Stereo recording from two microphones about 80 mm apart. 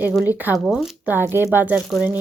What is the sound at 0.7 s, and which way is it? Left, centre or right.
Speech, centre.